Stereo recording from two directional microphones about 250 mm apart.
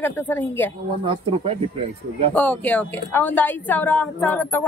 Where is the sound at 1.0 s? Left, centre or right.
Right.